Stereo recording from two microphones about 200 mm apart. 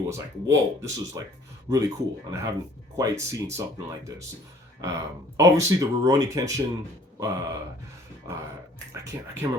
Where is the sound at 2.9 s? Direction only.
15° right (ahead or behind).